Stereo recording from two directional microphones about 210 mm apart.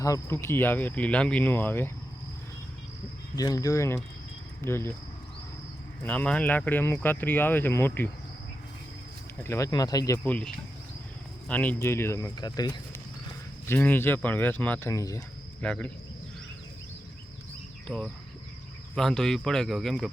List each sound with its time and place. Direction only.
0.0 s speech: 15° left (ahead or behind)
3.3 s speech: 15° left (ahead or behind)
6.0 s speech: 5° left (ahead or behind)
9.4 s speech: 15° left (ahead or behind)
17.8 s speech: 5° left (ahead or behind)